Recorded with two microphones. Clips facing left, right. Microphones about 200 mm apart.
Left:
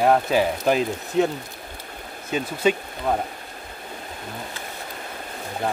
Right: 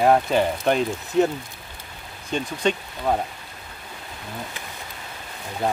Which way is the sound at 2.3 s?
5° left (ahead or behind).